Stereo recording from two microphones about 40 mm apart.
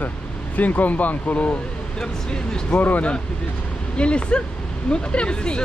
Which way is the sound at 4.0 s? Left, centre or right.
Left.